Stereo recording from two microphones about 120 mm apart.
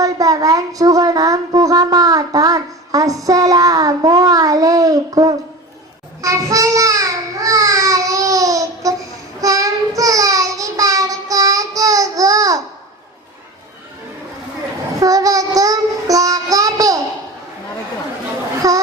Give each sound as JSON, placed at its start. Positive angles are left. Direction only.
{"t": 0.0, "sound": "speech", "side_deg": -30}
{"t": 6.2, "sound": "a sound", "side_deg": -25}
{"t": 9.4, "sound": "child singing", "side_deg": -30}
{"t": 15.0, "sound": "child singing", "side_deg": -30}
{"t": 18.6, "sound": "speech", "side_deg": -30}